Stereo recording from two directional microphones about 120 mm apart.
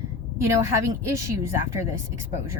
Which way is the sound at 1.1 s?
25° right (ahead or behind).